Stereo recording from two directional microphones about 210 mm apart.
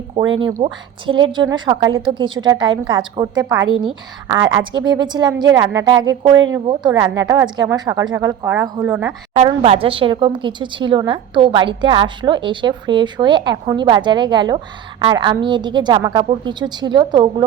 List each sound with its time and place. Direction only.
0.3 s a woman's voice: 25° right (ahead or behind); by 9.1 s 5° right (ahead or behind)
9.3 s a woman's voice: 30° right (ahead or behind)